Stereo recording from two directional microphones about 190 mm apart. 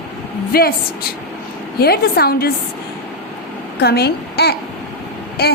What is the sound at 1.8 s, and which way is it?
Speech, 55° left (ahead or behind).